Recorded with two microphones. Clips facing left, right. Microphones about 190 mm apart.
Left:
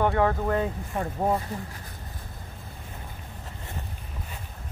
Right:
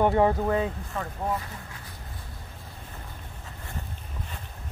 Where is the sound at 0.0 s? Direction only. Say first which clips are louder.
Right 2 dB; 15° right (ahead or behind).